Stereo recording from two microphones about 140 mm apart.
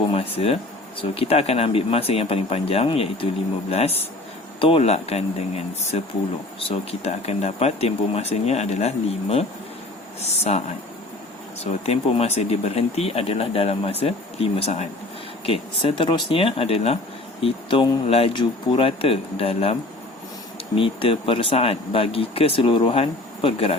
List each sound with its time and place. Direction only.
0.0 s speech: 45° left (ahead or behind)
11.6 s speech: 50° left (ahead or behind)
20.7 s speech: 40° left (ahead or behind)